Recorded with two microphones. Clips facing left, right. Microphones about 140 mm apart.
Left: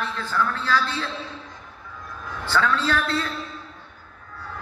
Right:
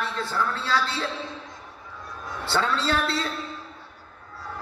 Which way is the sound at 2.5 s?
30° right (ahead or behind).